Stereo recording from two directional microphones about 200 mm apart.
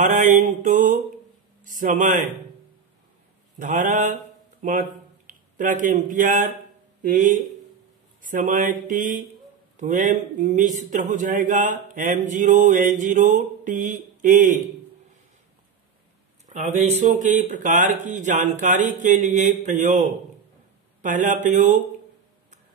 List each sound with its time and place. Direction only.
0.0 s speech: 40° right (ahead or behind)
3.5 s speech: 40° right (ahead or behind)
16.4 s speech: 35° right (ahead or behind)